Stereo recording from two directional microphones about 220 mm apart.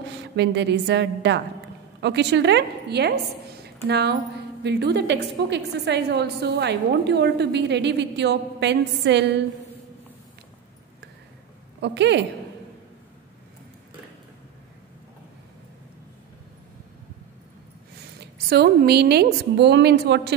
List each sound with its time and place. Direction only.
0.0 s a woman's voice: 50° right (ahead or behind)
11.8 s a woman's voice: 50° right (ahead or behind)
18.2 s a woman's voice: 45° right (ahead or behind)